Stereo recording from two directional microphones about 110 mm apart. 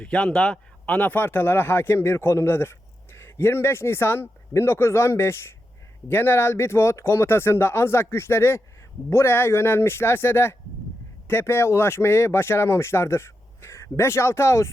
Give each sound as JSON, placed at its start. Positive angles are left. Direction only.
{"t": 0.0, "sound": "speech", "side_deg": 10}